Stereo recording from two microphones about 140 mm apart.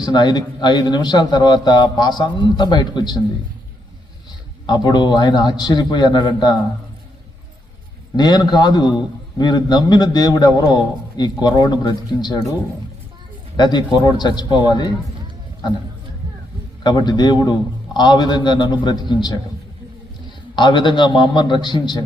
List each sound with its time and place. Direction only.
0.0 s a man's voice: 30° left (ahead or behind)
4.6 s a man's voice: 30° left (ahead or behind)
8.1 s a man's voice: 30° left (ahead or behind)
13.6 s a man's voice: 30° left (ahead or behind)
16.8 s a man's voice: 30° left (ahead or behind)
20.6 s a man's voice: 30° left (ahead or behind)